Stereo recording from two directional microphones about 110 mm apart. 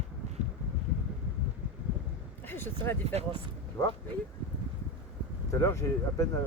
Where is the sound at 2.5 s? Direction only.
20° left (ahead or behind).